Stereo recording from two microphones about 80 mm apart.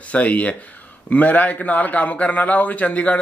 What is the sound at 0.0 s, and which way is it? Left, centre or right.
A man's voice, centre.